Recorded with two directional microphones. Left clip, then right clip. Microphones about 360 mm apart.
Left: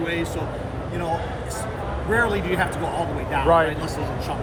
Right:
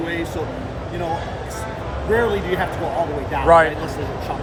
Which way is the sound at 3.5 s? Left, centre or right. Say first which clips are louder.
Right 6 dB; centre.